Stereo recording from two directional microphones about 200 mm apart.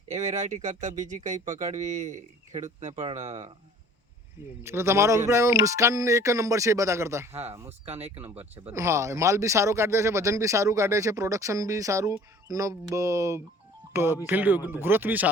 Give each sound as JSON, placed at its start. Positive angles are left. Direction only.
{"t": 0.1, "sound": "speech", "side_deg": -35}
{"t": 4.6, "sound": "speech", "side_deg": -10}
{"t": 7.7, "sound": "speech", "side_deg": -30}
{"t": 8.6, "sound": "speech", "side_deg": -15}